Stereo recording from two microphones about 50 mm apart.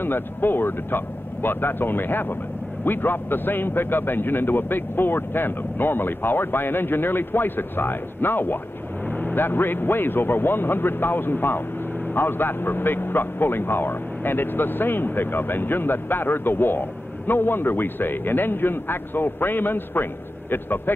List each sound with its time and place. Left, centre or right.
0.0 s a man's voice: left